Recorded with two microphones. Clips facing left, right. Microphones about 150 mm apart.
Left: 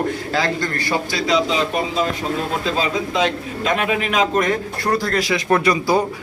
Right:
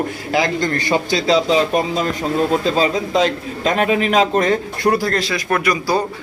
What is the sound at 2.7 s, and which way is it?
A man's voice, 35° right (ahead or behind).